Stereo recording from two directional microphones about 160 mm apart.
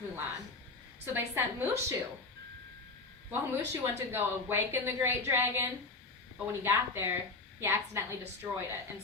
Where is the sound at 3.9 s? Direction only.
15° right (ahead or behind).